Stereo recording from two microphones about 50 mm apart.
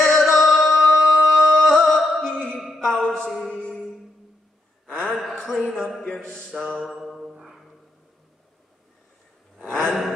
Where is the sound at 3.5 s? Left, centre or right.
Centre.